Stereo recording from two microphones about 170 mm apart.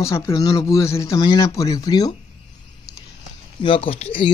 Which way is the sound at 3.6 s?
30° left (ahead or behind).